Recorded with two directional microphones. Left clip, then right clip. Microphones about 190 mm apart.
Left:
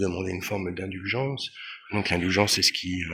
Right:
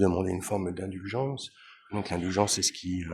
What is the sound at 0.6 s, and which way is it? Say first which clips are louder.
Speech: left 5 dB; 5° right (ahead or behind).